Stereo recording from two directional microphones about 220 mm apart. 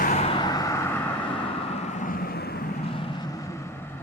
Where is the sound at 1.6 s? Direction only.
30° left (ahead or behind); by 2.6 s 45° left (ahead or behind).